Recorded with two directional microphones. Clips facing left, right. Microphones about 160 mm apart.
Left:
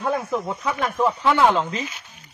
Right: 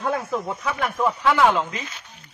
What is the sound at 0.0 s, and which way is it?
Speech, 5° left (ahead or behind).